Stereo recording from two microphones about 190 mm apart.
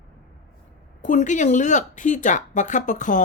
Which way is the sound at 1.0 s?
40° left (ahead or behind).